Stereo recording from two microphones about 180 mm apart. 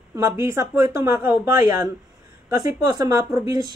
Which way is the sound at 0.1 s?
15° right (ahead or behind).